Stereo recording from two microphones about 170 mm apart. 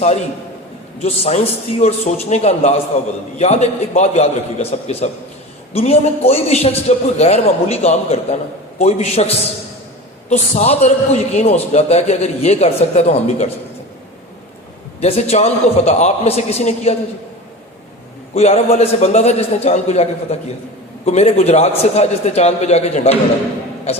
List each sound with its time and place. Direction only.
1.0 s a man's voice: 40° left (ahead or behind)
15.0 s a man's voice: 35° left (ahead or behind)
18.3 s a man's voice: 40° left (ahead or behind)